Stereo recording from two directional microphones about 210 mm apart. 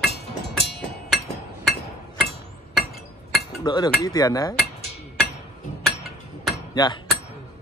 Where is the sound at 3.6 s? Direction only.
20° left (ahead or behind).